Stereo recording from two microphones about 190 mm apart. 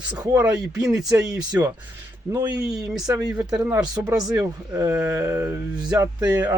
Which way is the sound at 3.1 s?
15° right (ahead or behind).